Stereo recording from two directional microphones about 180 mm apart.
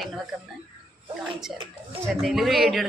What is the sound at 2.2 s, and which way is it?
Speech, centre (ahead or behind).